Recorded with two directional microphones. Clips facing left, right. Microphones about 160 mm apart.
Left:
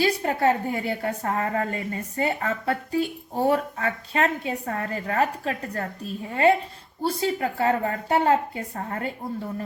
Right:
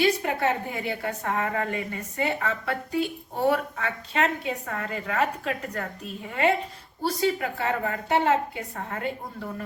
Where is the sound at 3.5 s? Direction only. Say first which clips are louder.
Left 1 dB; 35° left (ahead or behind).